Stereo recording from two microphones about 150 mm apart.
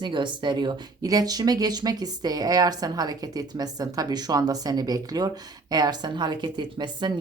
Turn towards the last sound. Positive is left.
turn(degrees=-30)  # may be behind; listen again after turning